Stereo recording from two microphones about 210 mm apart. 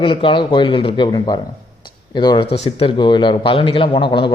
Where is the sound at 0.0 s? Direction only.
25° left (ahead or behind).